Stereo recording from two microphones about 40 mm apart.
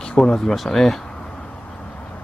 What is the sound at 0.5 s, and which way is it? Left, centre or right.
Speech, centre.